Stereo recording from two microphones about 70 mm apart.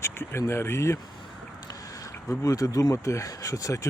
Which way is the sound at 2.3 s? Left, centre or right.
Left.